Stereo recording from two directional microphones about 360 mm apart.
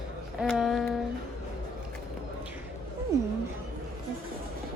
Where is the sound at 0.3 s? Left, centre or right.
Centre.